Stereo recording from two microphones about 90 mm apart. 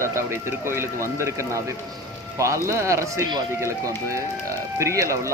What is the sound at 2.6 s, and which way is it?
Speech, 30° right (ahead or behind).